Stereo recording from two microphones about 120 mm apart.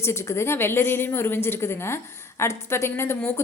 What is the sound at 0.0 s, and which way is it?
A woman's voice, 20° left (ahead or behind).